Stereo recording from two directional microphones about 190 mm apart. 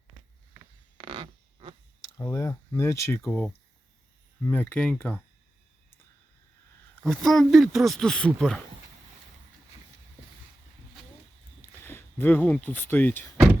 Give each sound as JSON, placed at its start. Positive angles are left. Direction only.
{"t": 0.9, "sound": "a sound", "side_deg": -25}
{"t": 2.0, "sound": "speech", "side_deg": 20}
{"t": 7.0, "sound": "speech", "side_deg": 0}
{"t": 11.8, "sound": "speech", "side_deg": 10}